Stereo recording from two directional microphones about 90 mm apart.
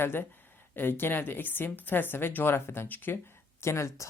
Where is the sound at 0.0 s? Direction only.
25° left (ahead or behind).